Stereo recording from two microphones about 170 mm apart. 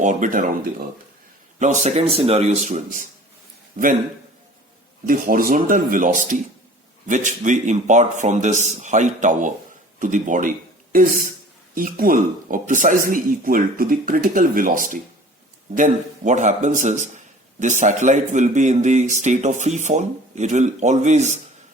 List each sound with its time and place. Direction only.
0.0 s a man's voice: 45° right (ahead or behind)
5.0 s speech: 55° right (ahead or behind)